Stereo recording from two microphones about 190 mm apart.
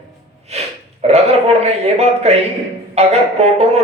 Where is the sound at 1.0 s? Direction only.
35° right (ahead or behind).